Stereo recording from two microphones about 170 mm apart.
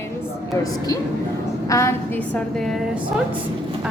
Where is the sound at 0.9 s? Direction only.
20° left (ahead or behind).